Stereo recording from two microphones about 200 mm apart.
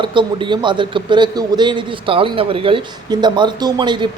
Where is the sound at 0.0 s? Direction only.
25° right (ahead or behind).